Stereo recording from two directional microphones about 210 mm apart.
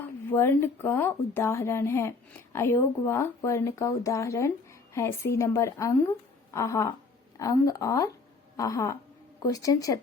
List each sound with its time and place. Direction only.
0.3 s a woman's voice: 10° left (ahead or behind)